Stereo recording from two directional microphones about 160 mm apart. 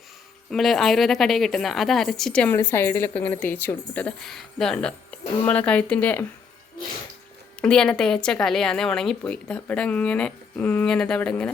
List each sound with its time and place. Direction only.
0.5 s a woman's voice: centre (ahead or behind)
7.6 s a woman's voice: 5° left (ahead or behind)